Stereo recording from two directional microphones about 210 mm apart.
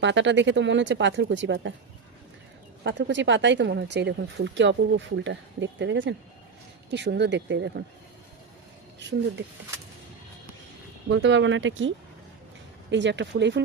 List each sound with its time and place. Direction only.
0.0 s speech: 60° right (ahead or behind)
2.8 s speech: 60° right (ahead or behind)
11.1 s speech: 60° right (ahead or behind)